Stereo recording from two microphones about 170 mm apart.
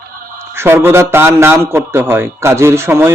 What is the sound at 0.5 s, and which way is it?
Speech, 15° right (ahead or behind).